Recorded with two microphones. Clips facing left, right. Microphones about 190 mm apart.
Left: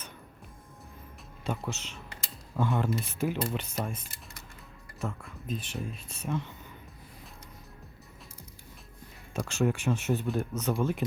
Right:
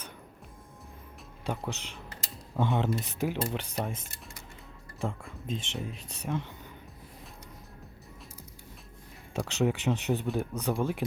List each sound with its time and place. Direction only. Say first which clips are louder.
1.5 s speech: even; 15° right (ahead or behind)
4.9 s speech: right 2 dB; 30° right (ahead or behind)
5.9 s speech: even; 15° right (ahead or behind)
9.3 s speech: even; 15° right (ahead or behind)